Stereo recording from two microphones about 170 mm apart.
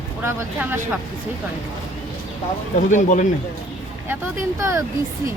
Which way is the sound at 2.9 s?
45° left (ahead or behind).